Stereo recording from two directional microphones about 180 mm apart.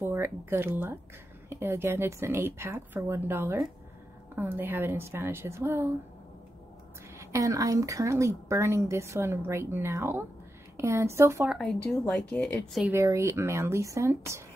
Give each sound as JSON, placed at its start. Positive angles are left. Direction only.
{"t": 0.0, "sound": "a woman's voice", "side_deg": -15}
{"t": 7.2, "sound": "a woman's voice", "side_deg": -15}
{"t": 11.5, "sound": "speech", "side_deg": 5}
{"t": 12.8, "sound": "a woman's voice", "side_deg": -15}